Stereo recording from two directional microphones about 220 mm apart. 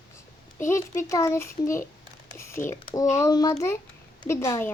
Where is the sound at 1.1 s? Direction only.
15° left (ahead or behind).